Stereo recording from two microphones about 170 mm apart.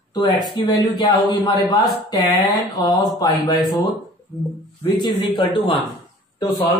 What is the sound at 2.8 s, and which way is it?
Speech, 25° left (ahead or behind).